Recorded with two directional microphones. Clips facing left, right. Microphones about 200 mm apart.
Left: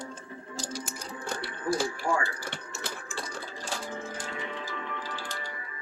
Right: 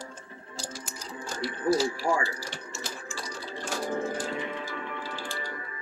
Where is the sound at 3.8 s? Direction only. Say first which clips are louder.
Right 7 dB; 55° right (ahead or behind).